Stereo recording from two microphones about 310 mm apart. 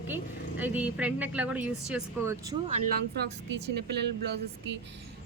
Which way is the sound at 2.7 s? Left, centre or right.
Right.